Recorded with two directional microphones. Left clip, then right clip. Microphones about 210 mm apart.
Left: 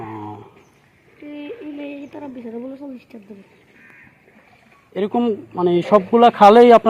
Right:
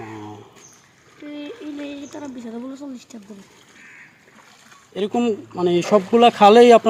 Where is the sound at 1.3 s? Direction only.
70° right (ahead or behind).